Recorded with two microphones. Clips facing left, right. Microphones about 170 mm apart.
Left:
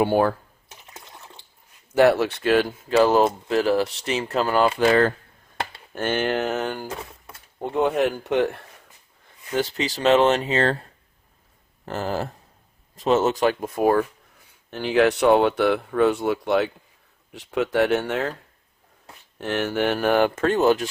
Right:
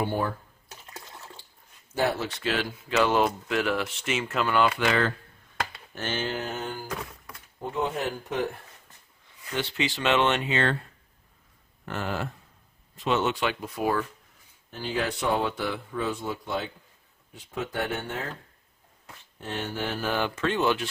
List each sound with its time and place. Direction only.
0.0 s speech: 75° left (ahead or behind)
2.0 s speech: 70° left (ahead or behind); by 2.7 s 50° left (ahead or behind)
2.9 s speech: 35° left (ahead or behind)
5.9 s speech: 55° left (ahead or behind); by 6.8 s 75° left (ahead or behind)
7.6 s speech: 65° left (ahead or behind)
9.6 s speech: 40° left (ahead or behind)
11.9 s speech: 35° left (ahead or behind)
14.7 s speech: 75° left (ahead or behind)
19.4 s speech: 80° left; by 20.8 s 40° left (ahead or behind)